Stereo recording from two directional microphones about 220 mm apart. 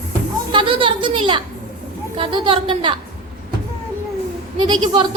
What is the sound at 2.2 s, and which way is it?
Speech, 25° right (ahead or behind).